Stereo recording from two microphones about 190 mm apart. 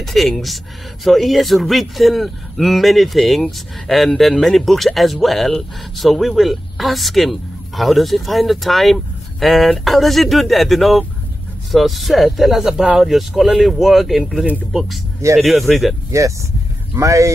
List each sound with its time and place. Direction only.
0.0 s a man's voice: centre (ahead or behind)
16.1 s speech: 15° right (ahead or behind)